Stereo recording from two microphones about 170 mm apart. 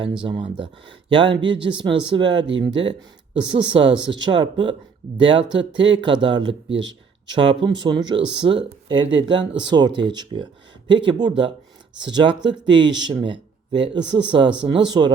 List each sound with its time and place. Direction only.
0.2 s speech: 30° right (ahead or behind)
6.7 s speech: 90° right
7.3 s speech: 30° right (ahead or behind)